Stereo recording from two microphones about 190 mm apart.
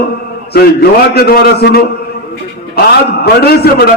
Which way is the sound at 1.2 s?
55° left (ahead or behind).